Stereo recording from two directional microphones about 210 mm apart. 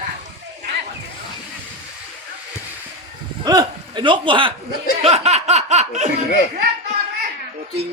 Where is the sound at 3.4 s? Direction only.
20° right (ahead or behind).